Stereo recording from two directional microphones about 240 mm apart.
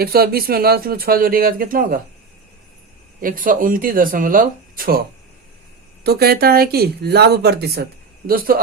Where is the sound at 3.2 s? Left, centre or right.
Right.